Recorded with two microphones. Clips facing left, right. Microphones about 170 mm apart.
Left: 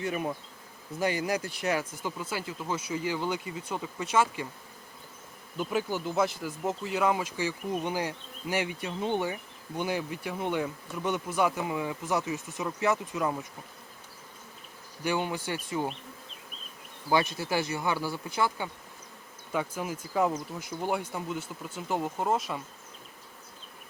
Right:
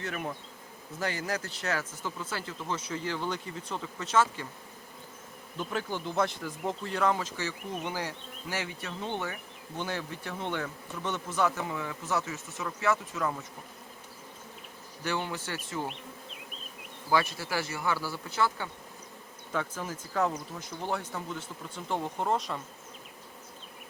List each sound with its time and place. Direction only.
0.0 s speech: 15° left (ahead or behind)
5.5 s speech: 5° left (ahead or behind)
15.0 s speech: 15° left (ahead or behind)
17.1 s speech: 20° left (ahead or behind)